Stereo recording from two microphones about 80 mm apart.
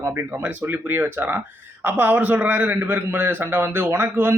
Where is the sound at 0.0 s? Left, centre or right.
Right.